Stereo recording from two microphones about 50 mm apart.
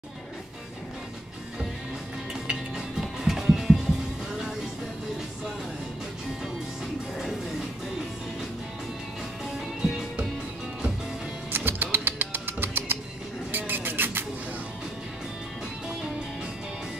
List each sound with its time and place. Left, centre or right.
2.4 s music: centre
9.8 s music: centre
11.5 s music: right
13.5 s a sound: right